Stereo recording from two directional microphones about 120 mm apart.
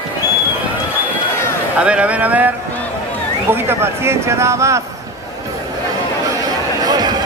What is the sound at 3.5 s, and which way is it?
Speech, 20° right (ahead or behind).